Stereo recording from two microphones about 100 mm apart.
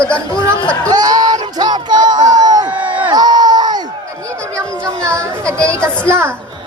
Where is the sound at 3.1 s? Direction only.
45° right (ahead or behind).